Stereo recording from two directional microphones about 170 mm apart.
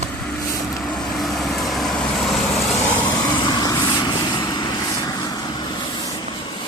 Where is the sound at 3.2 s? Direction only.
25° left (ahead or behind).